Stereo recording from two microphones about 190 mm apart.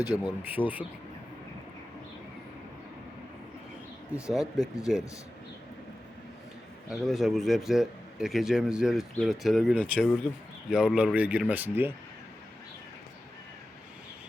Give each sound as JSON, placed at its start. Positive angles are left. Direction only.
{"t": 0.0, "sound": "speech", "side_deg": 20}
{"t": 0.4, "sound": "speech", "side_deg": -10}
{"t": 4.1, "sound": "a man's voice", "side_deg": 0}
{"t": 6.8, "sound": "a man's voice", "side_deg": 0}